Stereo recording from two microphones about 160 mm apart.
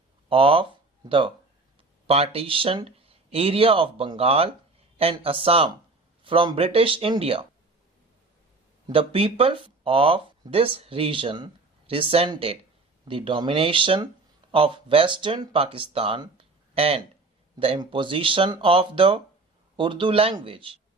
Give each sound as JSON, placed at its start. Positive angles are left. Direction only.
{"t": 0.3, "sound": "speech", "side_deg": -35}
{"t": 8.9, "sound": "speech", "side_deg": -35}